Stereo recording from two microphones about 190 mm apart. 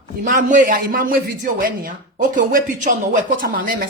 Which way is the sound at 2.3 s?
45° right (ahead or behind).